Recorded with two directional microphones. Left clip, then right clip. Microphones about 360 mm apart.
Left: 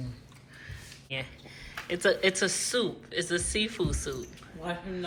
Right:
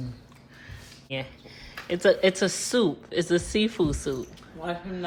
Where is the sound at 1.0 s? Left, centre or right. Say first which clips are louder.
Right 3 dB; centre.